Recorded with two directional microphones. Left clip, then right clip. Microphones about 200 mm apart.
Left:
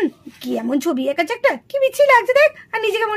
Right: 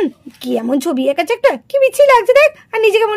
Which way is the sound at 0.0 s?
35° right (ahead or behind).